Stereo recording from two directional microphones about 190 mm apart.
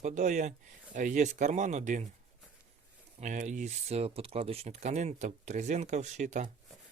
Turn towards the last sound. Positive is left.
turn(degrees=-40)  # may be behind; listen again after turning